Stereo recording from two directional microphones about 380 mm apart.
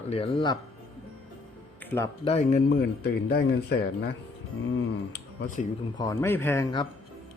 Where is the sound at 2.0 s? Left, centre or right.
Centre.